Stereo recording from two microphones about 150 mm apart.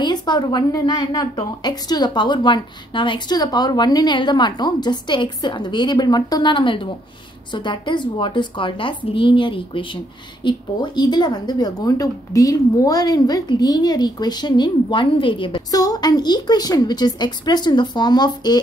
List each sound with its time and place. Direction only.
0.0 s a woman's voice: 30° left (ahead or behind)